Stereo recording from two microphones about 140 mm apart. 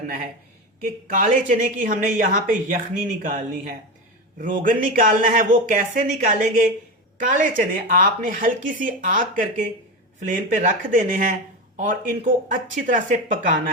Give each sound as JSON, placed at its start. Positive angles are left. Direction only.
{"t": 0.9, "sound": "a woman's voice", "side_deg": -75}
{"t": 11.8, "sound": "a woman's voice", "side_deg": -70}